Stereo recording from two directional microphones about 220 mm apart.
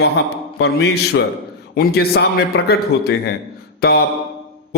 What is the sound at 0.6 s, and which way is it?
A man's voice, 50° left (ahead or behind).